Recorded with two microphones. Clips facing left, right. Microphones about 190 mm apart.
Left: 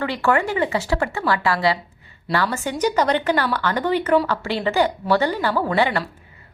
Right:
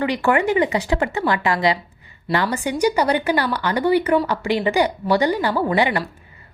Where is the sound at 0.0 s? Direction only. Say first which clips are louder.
Right 2 dB; 15° right (ahead or behind).